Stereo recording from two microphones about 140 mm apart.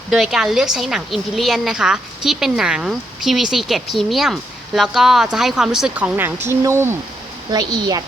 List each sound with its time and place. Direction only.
0.1 s a woman's voice: 5° right (ahead or behind); by 6.9 s 20° right (ahead or behind)
7.5 s speech: 30° right (ahead or behind)